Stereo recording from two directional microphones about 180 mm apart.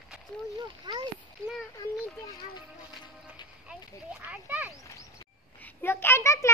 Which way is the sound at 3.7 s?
5° right (ahead or behind).